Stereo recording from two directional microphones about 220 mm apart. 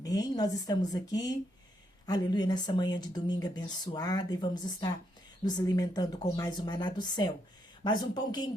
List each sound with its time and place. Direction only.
0.0 s speech: 15° left (ahead or behind)